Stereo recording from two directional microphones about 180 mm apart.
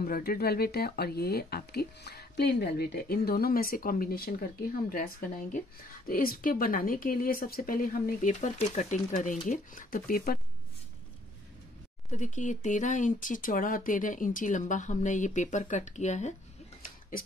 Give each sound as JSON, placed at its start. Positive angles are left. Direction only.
{"t": 0.0, "sound": "speech", "side_deg": 55}
{"t": 12.1, "sound": "speech", "side_deg": 45}